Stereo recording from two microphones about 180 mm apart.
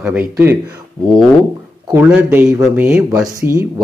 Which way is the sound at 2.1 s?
10° right (ahead or behind).